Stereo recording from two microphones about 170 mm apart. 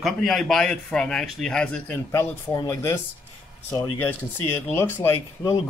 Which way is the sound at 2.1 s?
15° left (ahead or behind).